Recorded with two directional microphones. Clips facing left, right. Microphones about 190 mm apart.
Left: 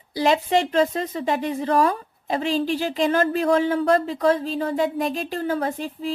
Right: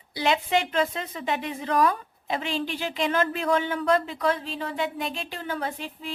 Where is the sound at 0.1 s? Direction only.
40° left (ahead or behind).